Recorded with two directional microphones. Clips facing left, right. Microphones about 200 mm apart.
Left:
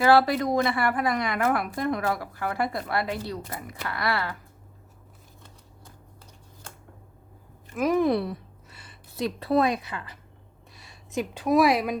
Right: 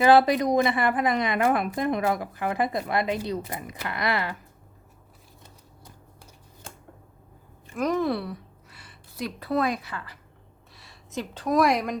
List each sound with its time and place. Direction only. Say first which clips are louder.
0.0 s a woman's voice: right 2 dB; 20° right (ahead or behind)
7.8 s a woman's voice: left 3 dB; 10° left (ahead or behind)